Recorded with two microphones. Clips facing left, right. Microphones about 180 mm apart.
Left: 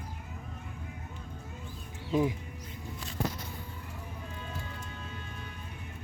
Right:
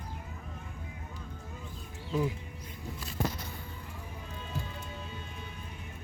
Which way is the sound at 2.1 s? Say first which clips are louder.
Left 3 dB; 20° left (ahead or behind).